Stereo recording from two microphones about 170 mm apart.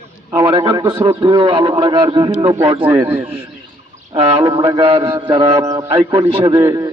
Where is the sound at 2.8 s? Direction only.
10° right (ahead or behind).